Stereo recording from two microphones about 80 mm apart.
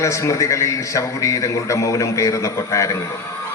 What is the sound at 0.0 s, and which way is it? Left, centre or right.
A man's voice, left.